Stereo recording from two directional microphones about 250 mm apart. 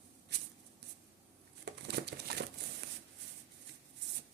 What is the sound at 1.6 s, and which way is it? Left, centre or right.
Crumpling, right.